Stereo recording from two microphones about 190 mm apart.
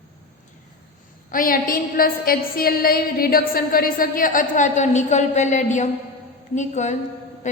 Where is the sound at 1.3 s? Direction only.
50° left (ahead or behind).